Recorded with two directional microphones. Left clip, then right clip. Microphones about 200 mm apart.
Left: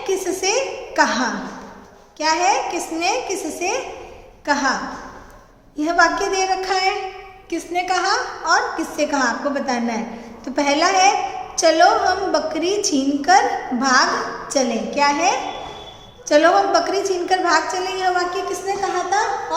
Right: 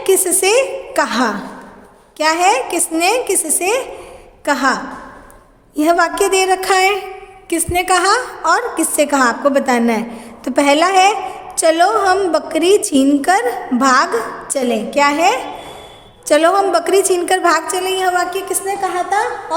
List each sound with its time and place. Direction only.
0.0 s a woman's voice: 55° right (ahead or behind)